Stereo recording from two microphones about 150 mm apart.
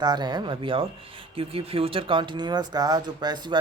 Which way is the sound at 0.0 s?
30° right (ahead or behind).